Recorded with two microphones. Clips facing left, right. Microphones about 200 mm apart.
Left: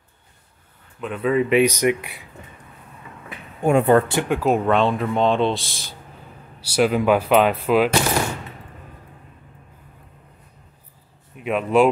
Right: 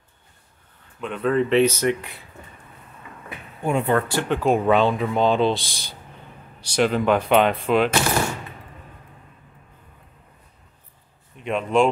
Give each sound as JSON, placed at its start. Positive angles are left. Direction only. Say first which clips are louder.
{"t": 1.0, "sound": "speech", "louder": "left 1 dB", "side_deg": 5}
{"t": 3.6, "sound": "speech", "louder": "left 6 dB", "side_deg": 45}
{"t": 4.1, "sound": "speech", "louder": "left 1 dB", "side_deg": 10}
{"t": 11.3, "sound": "speech", "louder": "left 2 dB", "side_deg": 5}